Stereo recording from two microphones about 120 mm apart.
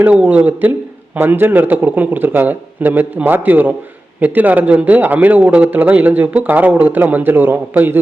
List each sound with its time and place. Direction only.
0.0 s a man's voice: 10° right (ahead or behind)